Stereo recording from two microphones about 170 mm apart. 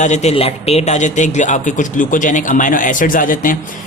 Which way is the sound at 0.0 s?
40° left (ahead or behind).